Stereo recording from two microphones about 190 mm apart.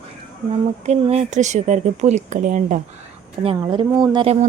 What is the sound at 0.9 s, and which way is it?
Speech, 35° right (ahead or behind).